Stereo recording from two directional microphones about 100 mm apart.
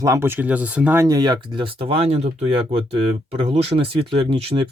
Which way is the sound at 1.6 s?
70° right (ahead or behind).